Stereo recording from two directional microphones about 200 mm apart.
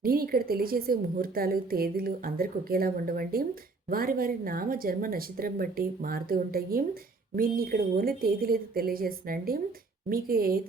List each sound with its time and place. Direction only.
0.0 s a woman's voice: 50° right (ahead or behind)